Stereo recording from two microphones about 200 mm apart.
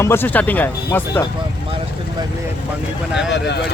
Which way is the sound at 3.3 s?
60° left (ahead or behind).